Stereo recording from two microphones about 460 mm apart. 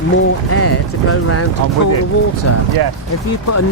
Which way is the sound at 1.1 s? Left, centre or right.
Left.